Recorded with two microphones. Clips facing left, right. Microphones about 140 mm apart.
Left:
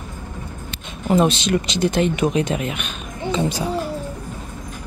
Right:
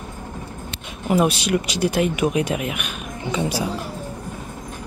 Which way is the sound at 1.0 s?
10° right (ahead or behind).